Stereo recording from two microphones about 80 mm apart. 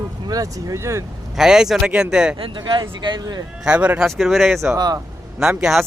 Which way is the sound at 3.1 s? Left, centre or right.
Right.